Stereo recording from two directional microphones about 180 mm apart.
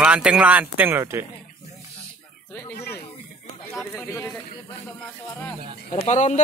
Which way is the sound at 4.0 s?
15° left (ahead or behind).